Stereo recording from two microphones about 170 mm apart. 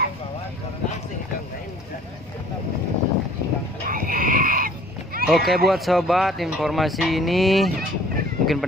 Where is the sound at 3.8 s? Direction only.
55° right (ahead or behind).